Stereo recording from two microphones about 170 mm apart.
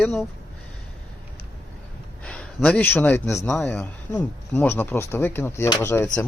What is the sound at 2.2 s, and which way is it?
A man's voice, 5° left (ahead or behind).